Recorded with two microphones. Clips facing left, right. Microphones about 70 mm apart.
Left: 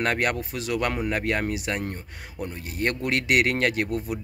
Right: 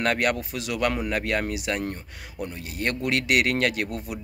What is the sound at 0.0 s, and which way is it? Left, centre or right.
Speech, left.